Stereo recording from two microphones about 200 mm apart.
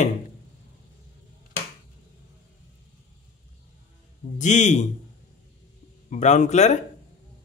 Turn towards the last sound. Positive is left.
turn(degrees=35)  # may be behind; listen again after turning